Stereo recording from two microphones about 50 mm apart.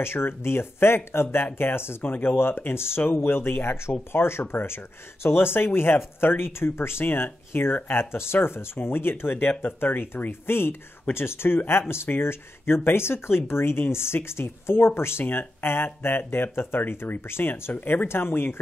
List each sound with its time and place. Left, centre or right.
0.0 s speech: left
18.0 s speech: left